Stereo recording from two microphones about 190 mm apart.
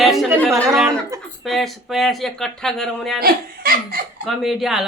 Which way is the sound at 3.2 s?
50° right (ahead or behind).